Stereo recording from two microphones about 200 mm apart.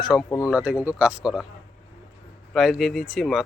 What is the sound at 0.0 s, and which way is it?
Speech, centre (ahead or behind).